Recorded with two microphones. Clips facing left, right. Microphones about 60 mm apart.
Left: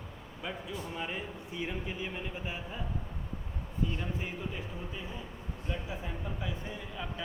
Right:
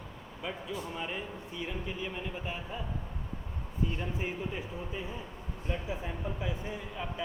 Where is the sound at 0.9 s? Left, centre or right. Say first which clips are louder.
Left 2 dB; centre.